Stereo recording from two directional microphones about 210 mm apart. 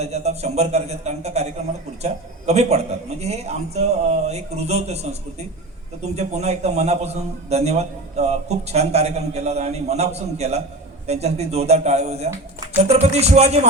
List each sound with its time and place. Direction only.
0.0 s a man's voice: 30° right (ahead or behind)
6.0 s a man's voice: 30° right (ahead or behind)